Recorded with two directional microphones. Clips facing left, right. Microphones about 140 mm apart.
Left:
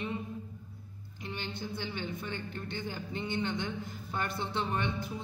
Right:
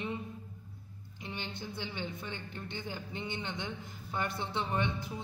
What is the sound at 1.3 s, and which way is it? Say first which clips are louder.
A woman's voice: left 3 dB; 20° right (ahead or behind).